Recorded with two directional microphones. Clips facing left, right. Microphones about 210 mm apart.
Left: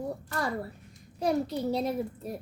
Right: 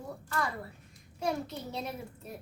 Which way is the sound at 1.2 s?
35° left (ahead or behind).